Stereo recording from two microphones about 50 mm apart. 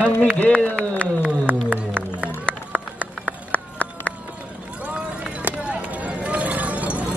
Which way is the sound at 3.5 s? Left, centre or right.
Left.